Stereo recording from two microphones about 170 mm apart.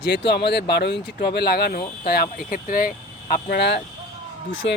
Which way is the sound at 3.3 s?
75° left (ahead or behind).